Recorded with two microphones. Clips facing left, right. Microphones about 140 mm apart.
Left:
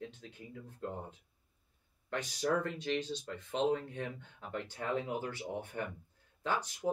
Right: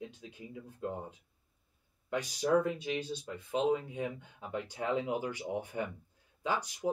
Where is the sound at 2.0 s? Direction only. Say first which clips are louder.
Right 3 dB; 10° right (ahead or behind).